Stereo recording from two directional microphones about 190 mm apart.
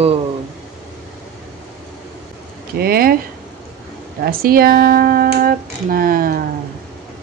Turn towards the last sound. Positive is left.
turn(degrees=-50)  # may be behind; listen again after turning